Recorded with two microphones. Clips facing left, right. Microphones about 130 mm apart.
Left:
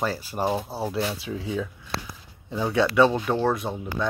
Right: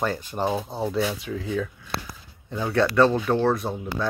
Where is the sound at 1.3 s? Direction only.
20° left (ahead or behind).